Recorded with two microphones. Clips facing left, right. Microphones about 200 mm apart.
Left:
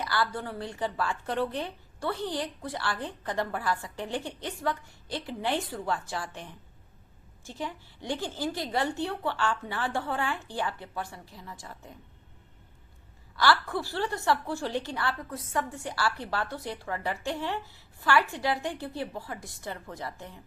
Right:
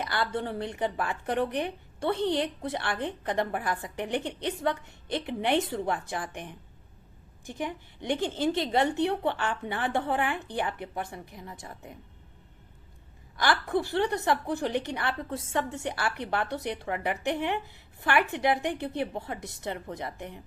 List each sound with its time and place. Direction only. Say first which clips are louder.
0.0 s a woman's voice: right 1 dB; 20° right (ahead or behind)
13.3 s a woman's voice: even; 20° right (ahead or behind)